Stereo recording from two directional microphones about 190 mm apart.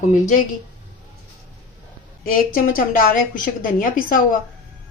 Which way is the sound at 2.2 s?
45° left (ahead or behind).